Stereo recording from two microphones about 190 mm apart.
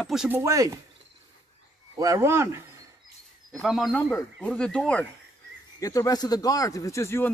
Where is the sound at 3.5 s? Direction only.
Centre (ahead or behind).